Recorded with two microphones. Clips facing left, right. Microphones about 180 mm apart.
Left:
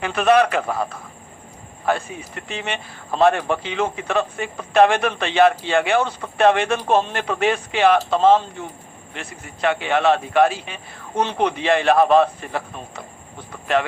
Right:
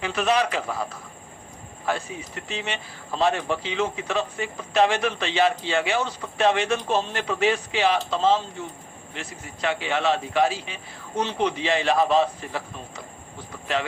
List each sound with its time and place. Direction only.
0.0 s speech: 55° left (ahead or behind)